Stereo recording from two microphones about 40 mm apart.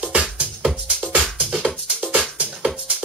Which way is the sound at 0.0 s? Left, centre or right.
Right.